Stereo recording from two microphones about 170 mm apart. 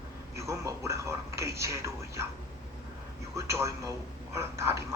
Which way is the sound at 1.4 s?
15° right (ahead or behind).